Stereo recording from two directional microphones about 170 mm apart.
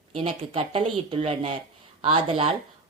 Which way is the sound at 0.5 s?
30° right (ahead or behind).